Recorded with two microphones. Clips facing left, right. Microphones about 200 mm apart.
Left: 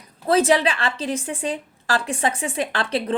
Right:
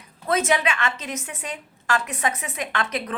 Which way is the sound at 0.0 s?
35° left (ahead or behind).